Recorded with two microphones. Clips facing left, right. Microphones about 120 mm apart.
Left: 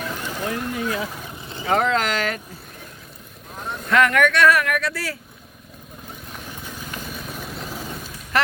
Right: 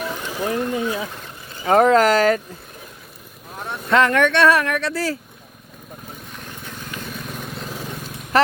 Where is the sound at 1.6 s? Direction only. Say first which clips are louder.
Right 7 dB; 40° right (ahead or behind).